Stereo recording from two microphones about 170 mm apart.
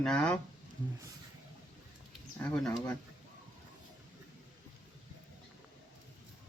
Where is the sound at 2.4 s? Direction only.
5° left (ahead or behind).